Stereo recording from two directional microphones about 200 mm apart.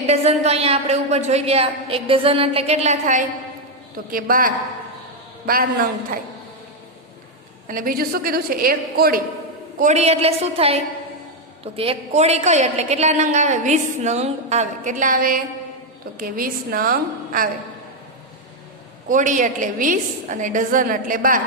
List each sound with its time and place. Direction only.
0.1 s a woman's voice: 30° right (ahead or behind); by 6.1 s 45° right (ahead or behind)
7.7 s a woman's voice: 45° right (ahead or behind)
9.8 s a woman's voice: 35° right (ahead or behind)
19.0 s a woman's voice: 40° right (ahead or behind)